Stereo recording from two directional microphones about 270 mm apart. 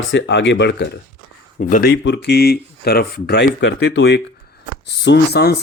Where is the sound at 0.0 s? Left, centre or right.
Left.